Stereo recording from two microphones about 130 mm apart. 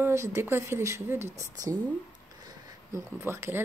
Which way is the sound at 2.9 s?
20° right (ahead or behind).